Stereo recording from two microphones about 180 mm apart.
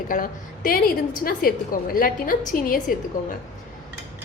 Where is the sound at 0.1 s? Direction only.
50° left (ahead or behind).